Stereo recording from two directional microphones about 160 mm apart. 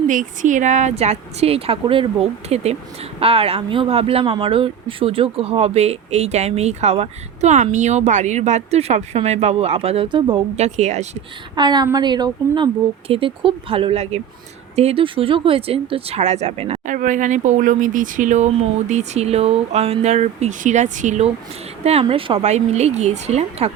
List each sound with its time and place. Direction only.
0.1 s speech: 55° right (ahead or behind)
11.5 s a woman's voice: 25° right (ahead or behind); by 21.2 s 50° right (ahead or behind)
21.8 s speech: 35° right (ahead or behind)